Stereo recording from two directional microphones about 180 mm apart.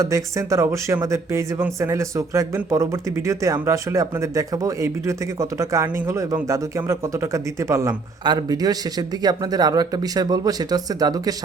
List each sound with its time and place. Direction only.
0.0 s speech: 15° right (ahead or behind)